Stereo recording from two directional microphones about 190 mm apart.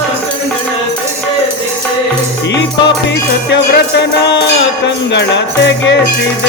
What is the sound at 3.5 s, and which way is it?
Music, 65° left (ahead or behind).